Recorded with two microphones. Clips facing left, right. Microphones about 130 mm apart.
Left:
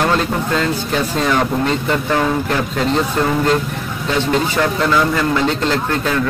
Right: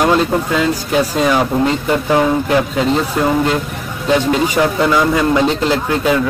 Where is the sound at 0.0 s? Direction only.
5° right (ahead or behind).